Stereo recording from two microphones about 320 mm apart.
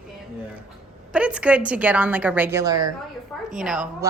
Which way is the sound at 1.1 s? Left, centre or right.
Centre.